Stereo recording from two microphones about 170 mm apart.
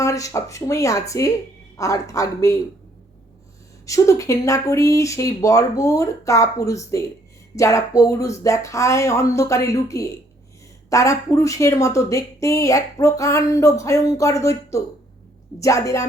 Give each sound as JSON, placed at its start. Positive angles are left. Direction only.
{"t": 0.0, "sound": "a woman's voice", "side_deg": 20}
{"t": 3.8, "sound": "a woman's voice", "side_deg": 20}